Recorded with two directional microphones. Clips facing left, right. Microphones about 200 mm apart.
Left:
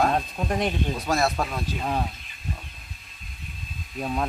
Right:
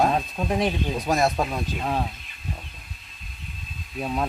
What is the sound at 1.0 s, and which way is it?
Speech, 15° right (ahead or behind).